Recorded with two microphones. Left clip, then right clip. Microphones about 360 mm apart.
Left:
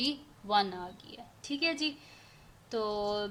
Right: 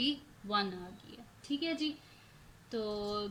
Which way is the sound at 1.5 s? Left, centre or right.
Centre.